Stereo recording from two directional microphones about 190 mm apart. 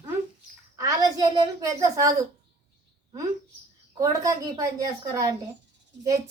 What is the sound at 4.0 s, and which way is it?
A woman's voice, 20° right (ahead or behind).